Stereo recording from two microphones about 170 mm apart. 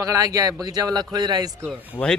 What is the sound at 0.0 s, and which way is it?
Speech, 20° right (ahead or behind).